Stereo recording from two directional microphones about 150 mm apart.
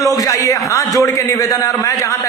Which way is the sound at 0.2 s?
20° left (ahead or behind).